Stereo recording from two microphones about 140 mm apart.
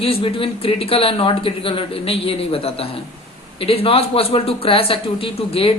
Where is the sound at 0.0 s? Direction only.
40° left (ahead or behind).